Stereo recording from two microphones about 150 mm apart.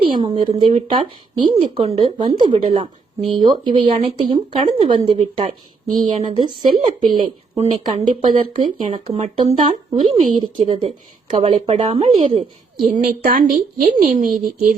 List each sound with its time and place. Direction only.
0.0 s a woman's voice: 35° right (ahead or behind)
4.9 s a woman's voice: 45° right (ahead or behind)
5.9 s a woman's voice: 55° right (ahead or behind)
6.8 s a woman's voice: 30° right (ahead or behind); by 8.3 s 45° right (ahead or behind)
8.5 s a woman's voice: 35° right (ahead or behind)
12.9 s speech: 70° right (ahead or behind)
13.8 s a woman's voice: 45° right (ahead or behind)